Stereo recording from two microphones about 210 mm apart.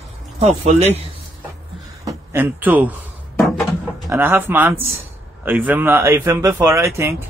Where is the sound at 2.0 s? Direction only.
10° right (ahead or behind).